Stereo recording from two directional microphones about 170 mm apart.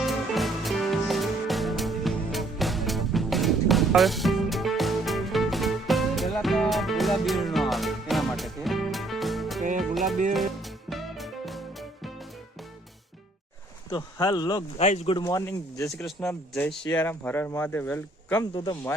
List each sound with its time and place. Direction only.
0.0 s music: centre (ahead or behind)
13.9 s speech: 25° left (ahead or behind)
14.8 s speech: 40° left (ahead or behind)
15.2 s speech: 15° left (ahead or behind)
16.0 s a man's voice: 5° left (ahead or behind)
18.5 s speech: 25° left (ahead or behind)